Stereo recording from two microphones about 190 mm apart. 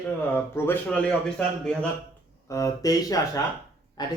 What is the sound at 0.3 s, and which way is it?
Speech, 10° left (ahead or behind).